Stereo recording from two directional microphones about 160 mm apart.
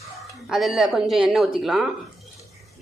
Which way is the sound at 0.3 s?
Centre (ahead or behind).